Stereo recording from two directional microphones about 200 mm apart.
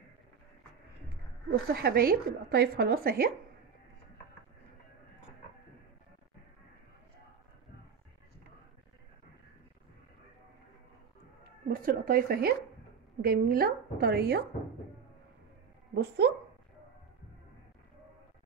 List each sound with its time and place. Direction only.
1.5 s speech: 50° right (ahead or behind)
11.6 s speech: 45° right (ahead or behind)
15.9 s speech: 55° right (ahead or behind)